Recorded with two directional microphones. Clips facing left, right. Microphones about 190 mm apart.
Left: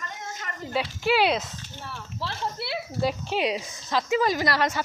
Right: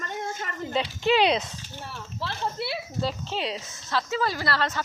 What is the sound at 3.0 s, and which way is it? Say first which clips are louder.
A woman's voice: left 5 dB; 15° left (ahead or behind).